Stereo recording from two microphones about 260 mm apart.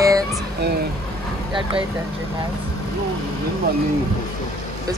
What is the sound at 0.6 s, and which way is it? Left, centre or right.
Speech, right.